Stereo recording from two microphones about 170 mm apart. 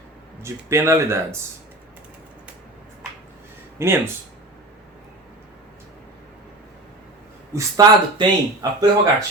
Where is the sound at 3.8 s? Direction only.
15° right (ahead or behind).